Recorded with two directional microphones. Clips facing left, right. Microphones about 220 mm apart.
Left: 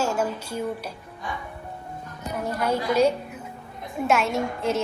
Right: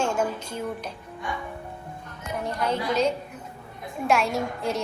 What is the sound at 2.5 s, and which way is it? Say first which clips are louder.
A woman's voice: left 2 dB; 5° left (ahead or behind).